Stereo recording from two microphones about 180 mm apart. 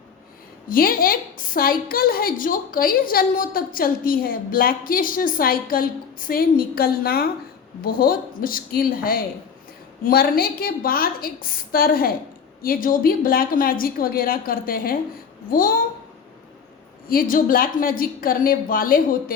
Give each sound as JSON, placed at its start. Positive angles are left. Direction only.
{"t": 0.7, "sound": "a woman's voice", "side_deg": 55}
{"t": 17.1, "sound": "a woman's voice", "side_deg": 50}